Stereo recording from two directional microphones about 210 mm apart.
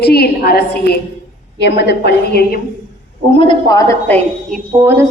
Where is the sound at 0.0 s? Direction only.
50° left (ahead or behind).